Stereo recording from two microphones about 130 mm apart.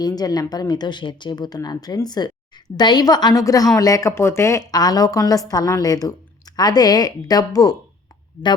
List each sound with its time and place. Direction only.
0.0 s a woman's voice: 30° left (ahead or behind)